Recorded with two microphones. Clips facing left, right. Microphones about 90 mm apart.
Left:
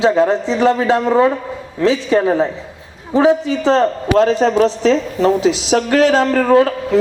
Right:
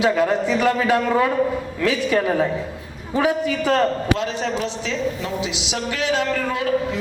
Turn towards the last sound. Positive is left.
turn(degrees=40)  # may be behind; listen again after turning